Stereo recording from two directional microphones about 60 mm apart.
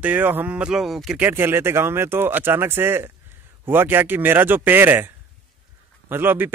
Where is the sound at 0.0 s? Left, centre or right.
Right.